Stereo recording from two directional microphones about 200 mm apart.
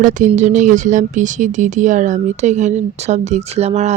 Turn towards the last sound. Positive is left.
turn(degrees=-30)  # may be behind; listen again after turning